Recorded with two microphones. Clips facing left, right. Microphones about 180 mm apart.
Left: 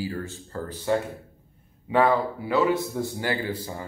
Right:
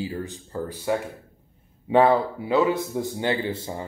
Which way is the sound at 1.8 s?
30° right (ahead or behind).